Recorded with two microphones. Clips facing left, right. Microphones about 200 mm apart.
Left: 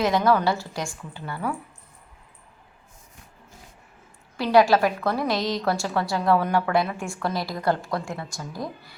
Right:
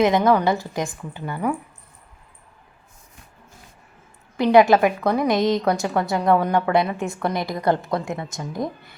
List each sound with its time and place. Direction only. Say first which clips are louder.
0.0 s a woman's voice: right 4 dB; 20° right (ahead or behind)
4.4 s a woman's voice: right 4 dB; 20° right (ahead or behind)